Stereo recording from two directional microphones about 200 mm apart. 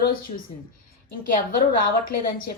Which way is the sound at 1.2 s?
45° left (ahead or behind).